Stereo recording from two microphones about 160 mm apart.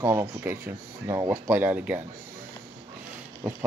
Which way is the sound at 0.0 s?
20° right (ahead or behind).